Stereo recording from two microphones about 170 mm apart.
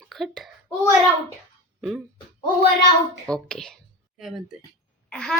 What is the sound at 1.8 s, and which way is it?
Speech, centre (ahead or behind).